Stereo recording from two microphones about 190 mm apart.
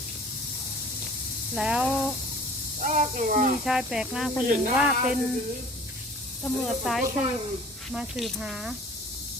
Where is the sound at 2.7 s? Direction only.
40° right (ahead or behind).